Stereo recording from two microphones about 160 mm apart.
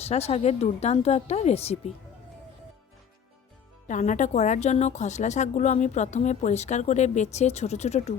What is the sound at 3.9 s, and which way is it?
A woman's voice, 50° left (ahead or behind).